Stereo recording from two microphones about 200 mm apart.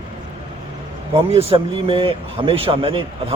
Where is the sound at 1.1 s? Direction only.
30° right (ahead or behind).